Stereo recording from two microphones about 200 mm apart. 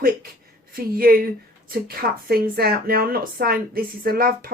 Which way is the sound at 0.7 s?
45° right (ahead or behind).